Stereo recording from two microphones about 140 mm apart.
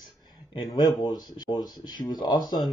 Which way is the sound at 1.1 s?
30° left (ahead or behind).